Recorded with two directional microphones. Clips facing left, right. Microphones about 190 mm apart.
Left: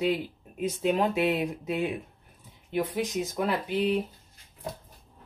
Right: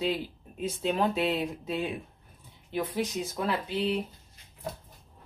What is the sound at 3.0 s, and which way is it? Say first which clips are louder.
Speech: left 2 dB; 15° left (ahead or behind).